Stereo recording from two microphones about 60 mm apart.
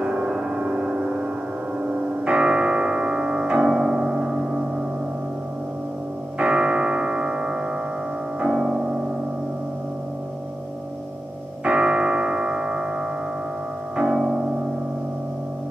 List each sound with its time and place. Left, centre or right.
0.0 s gong: centre
1.8 s music: centre
6.3 s music: centre
11.6 s music: centre
13.9 s music: centre